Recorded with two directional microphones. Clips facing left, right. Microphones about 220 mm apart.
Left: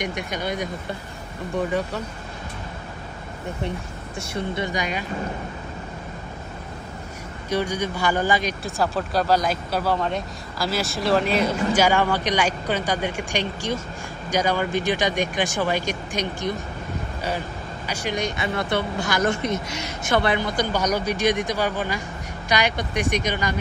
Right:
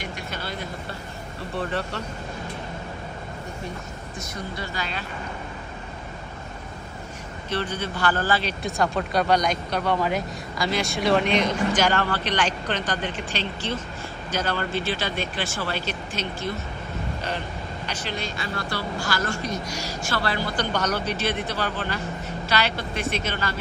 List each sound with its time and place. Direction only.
0.0 s speech: 15° left (ahead or behind)
4.2 s speech: 30° left (ahead or behind)
4.6 s speech: 15° left (ahead or behind)
7.4 s speech: 10° left (ahead or behind)
8.6 s speech: centre (ahead or behind)
17.8 s speech: 10° left (ahead or behind)